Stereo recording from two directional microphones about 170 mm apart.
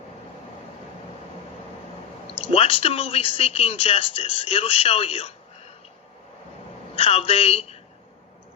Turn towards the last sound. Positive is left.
turn(degrees=35)  # may be behind; listen again after turning